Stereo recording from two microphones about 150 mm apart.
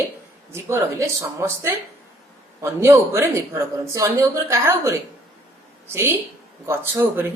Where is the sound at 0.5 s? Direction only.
20° right (ahead or behind).